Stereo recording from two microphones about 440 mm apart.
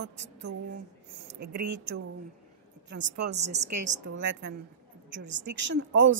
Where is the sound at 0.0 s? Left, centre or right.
Right.